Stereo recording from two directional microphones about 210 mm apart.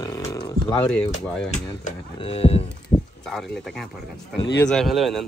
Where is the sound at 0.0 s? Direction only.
15° left (ahead or behind).